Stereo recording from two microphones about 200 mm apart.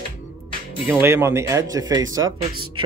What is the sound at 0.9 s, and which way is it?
A man's voice, 10° right (ahead or behind).